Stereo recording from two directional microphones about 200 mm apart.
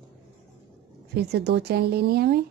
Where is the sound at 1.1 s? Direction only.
55° right (ahead or behind).